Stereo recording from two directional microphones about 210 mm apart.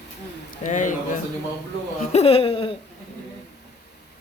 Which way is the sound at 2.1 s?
25° left (ahead or behind).